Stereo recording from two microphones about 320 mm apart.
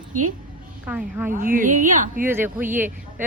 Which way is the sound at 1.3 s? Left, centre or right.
Right.